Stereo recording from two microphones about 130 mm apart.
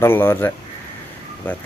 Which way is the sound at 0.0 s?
15° left (ahead or behind).